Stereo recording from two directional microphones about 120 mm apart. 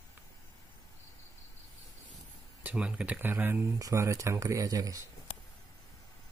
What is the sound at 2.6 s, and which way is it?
Speech, 10° right (ahead or behind).